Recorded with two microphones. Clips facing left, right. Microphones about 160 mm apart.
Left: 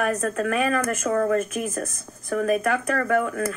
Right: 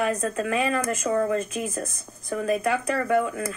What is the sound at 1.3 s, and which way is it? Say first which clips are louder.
Speech: left 3 dB; 35° right (ahead or behind).